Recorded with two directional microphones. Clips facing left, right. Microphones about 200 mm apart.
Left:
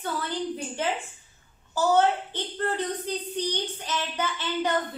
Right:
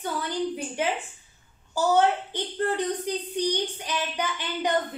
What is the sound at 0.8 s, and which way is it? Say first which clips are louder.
A child's voice: right 3 dB; 10° right (ahead or behind).